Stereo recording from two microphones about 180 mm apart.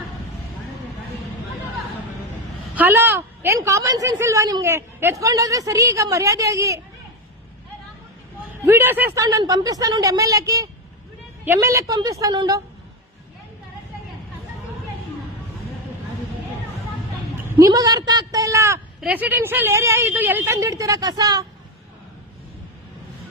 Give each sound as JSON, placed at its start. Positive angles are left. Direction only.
{"t": 2.7, "sound": "a woman's voice", "side_deg": -10}
{"t": 8.6, "sound": "speech", "side_deg": -15}
{"t": 17.6, "sound": "a woman's voice", "side_deg": -20}